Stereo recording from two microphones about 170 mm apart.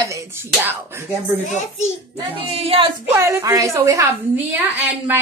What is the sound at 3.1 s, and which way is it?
Speech, 15° right (ahead or behind).